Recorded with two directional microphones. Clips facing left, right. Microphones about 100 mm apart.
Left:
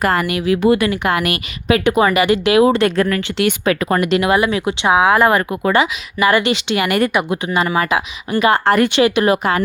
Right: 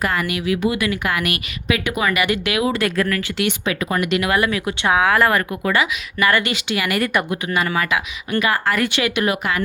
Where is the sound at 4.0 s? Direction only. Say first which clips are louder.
Left 1 dB; 35° left (ahead or behind).